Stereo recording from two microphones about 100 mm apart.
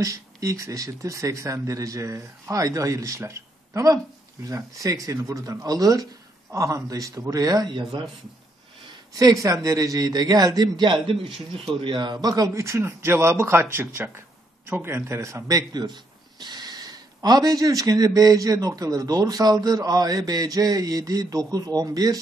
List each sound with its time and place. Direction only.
0.0 s speech: 35° right (ahead or behind)
9.1 s speech: 35° right (ahead or behind)
12.5 s speech: 30° right (ahead or behind)